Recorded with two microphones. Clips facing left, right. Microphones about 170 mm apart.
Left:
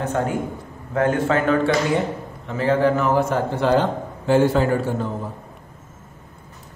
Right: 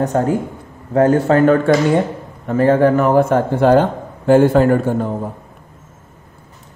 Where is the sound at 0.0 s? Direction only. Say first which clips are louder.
Right 6 dB; 40° right (ahead or behind).